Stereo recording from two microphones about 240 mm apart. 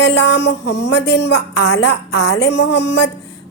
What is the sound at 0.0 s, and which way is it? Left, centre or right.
A woman's voice, left.